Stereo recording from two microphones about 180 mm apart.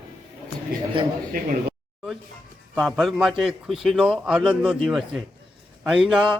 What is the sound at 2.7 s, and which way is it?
A man's voice, centre (ahead or behind).